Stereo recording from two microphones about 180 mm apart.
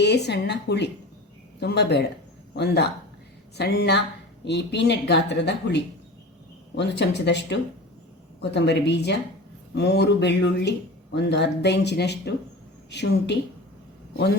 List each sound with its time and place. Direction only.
0.0 s speech: 70° left (ahead or behind)